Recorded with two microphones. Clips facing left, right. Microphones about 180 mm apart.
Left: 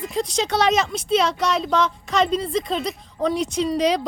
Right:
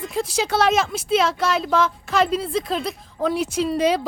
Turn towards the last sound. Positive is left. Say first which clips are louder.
# even
turn(degrees=-5)  # may be behind; listen again after turning